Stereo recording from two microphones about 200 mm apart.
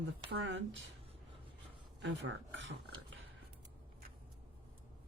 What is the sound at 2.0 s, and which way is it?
Speech, 65° right (ahead or behind).